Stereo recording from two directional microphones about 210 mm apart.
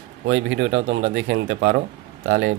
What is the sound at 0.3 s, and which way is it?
Speech, 60° right (ahead or behind).